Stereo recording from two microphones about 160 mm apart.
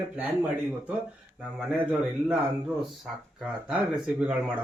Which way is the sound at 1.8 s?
5° right (ahead or behind).